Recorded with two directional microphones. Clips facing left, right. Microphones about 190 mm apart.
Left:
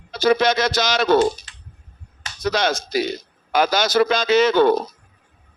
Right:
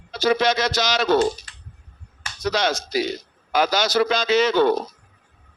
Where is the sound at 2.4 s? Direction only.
50° left (ahead or behind).